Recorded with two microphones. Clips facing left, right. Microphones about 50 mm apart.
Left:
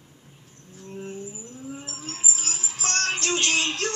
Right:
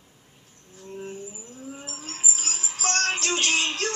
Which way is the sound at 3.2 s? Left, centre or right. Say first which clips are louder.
Even; centre.